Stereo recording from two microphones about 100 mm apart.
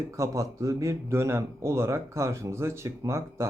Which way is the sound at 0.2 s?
30° right (ahead or behind).